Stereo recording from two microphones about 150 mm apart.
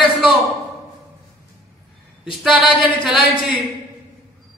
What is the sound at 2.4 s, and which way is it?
A woman's voice, centre (ahead or behind).